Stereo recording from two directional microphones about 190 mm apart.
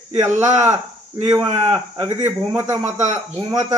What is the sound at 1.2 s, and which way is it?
A man's voice, 15° right (ahead or behind).